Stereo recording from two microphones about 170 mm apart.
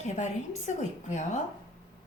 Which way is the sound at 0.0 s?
45° left (ahead or behind).